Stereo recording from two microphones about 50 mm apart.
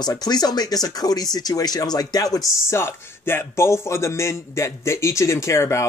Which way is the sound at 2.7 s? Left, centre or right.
Left.